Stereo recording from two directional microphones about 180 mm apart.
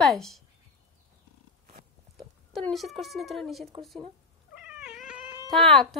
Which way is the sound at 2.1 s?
Centre (ahead or behind).